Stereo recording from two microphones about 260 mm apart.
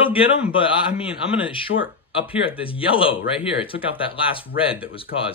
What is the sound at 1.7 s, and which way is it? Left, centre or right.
Speech, left.